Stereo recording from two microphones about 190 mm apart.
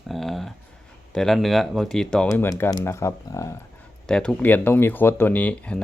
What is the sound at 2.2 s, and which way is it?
Speech, 15° left (ahead or behind).